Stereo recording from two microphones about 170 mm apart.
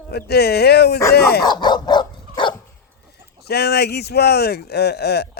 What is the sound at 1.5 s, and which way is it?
Dog, 25° left (ahead or behind).